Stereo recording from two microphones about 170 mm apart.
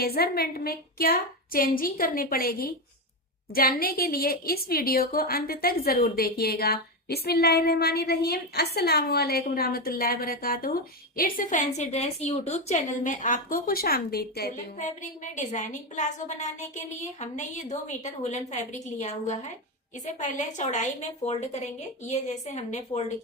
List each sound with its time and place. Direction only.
0.0 s a woman's voice: 65° left (ahead or behind)
11.8 s a woman's voice: 40° left (ahead or behind); by 14.5 s 65° left (ahead or behind)
15.4 s a woman's voice: 45° left (ahead or behind)